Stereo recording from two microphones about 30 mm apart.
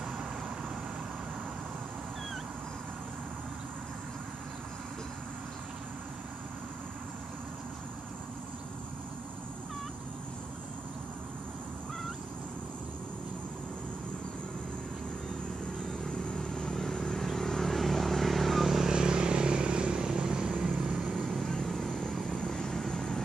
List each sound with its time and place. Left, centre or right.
16.3 s vehicle: centre
18.9 s vehicle: right
21.6 s vehicle: centre
22.4 s vehicle: centre